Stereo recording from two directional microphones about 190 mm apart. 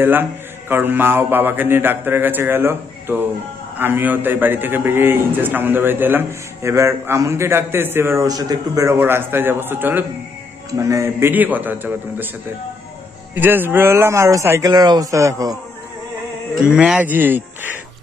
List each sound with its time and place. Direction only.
0.0 s a man's voice: 10° right (ahead or behind)
13.3 s a man's voice: 10° right (ahead or behind)
16.7 s a man's voice: 5° right (ahead or behind)